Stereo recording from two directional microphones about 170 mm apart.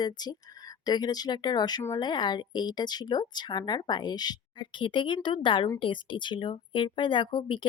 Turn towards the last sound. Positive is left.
turn(degrees=30)  # may be behind; listen again after turning